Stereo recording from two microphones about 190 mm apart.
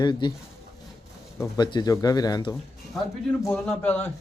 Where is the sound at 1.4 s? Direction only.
20° left (ahead or behind).